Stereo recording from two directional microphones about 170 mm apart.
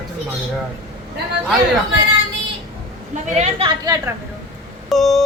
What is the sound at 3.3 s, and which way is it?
Speech, 40° right (ahead or behind).